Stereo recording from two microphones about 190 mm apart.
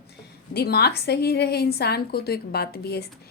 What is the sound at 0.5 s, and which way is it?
A woman's voice, 55° left (ahead or behind).